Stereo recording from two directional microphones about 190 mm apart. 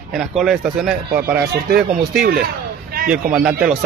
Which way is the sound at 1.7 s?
50° right (ahead or behind).